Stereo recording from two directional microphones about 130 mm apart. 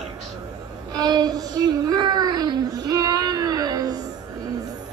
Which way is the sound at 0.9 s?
30° right (ahead or behind).